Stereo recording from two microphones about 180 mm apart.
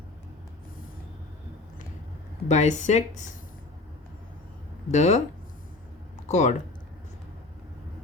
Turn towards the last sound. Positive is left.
turn(degrees=40)  # may be behind; listen again after turning